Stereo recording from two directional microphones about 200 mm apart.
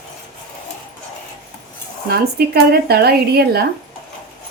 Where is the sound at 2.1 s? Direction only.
50° right (ahead or behind).